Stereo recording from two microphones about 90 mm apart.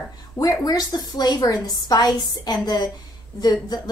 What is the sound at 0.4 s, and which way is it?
A woman's voice, 45° left (ahead or behind).